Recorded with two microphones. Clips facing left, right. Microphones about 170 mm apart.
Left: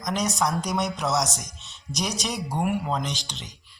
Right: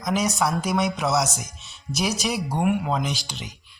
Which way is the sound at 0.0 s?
5° right (ahead or behind).